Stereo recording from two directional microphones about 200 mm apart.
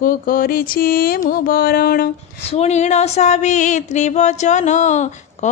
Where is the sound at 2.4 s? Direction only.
30° left (ahead or behind).